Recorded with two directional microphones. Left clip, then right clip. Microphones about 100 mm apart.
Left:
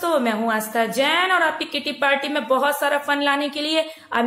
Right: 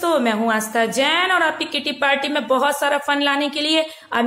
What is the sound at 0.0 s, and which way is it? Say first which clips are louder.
A woman's voice: right 2 dB; 25° right (ahead or behind).